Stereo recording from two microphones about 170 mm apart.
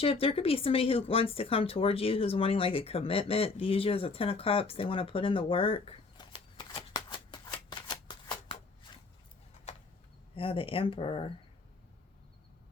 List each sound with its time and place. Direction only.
0.0 s speech: 35° left (ahead or behind)
10.3 s speech: 30° left (ahead or behind)